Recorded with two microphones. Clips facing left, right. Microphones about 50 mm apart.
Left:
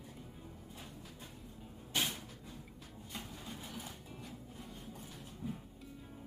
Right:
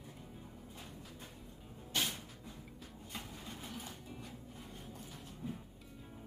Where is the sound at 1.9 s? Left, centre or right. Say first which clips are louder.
Left 1 dB; centre.